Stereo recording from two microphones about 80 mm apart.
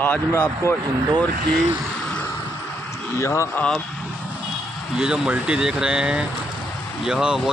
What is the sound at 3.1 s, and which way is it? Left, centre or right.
Speech, left.